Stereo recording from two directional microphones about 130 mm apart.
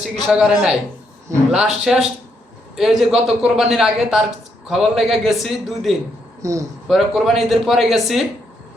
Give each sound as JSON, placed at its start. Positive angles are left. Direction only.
{"t": 0.0, "sound": "a man's voice", "side_deg": -5}
{"t": 6.4, "sound": "speech", "side_deg": -25}
{"t": 6.8, "sound": "a man's voice", "side_deg": 0}